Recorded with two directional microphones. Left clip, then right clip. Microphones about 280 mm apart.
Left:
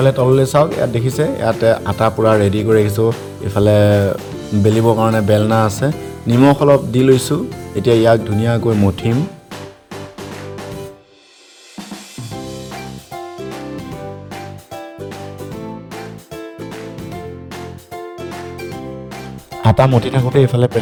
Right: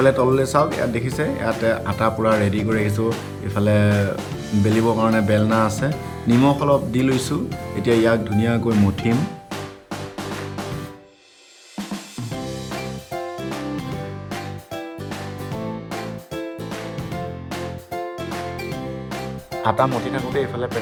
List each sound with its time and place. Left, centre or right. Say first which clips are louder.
0.0 s speech: left 3 dB; left
13.1 s music: left 1 dB; centre
15.6 s music: even; centre
17.9 s music: even; centre
19.6 s speech: left 5 dB; left